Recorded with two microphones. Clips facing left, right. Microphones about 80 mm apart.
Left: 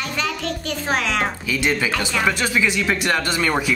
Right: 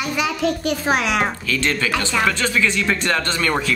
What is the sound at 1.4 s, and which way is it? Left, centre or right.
Speech, centre.